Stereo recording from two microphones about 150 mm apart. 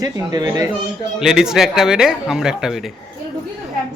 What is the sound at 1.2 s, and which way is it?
A man's voice, 5° right (ahead or behind).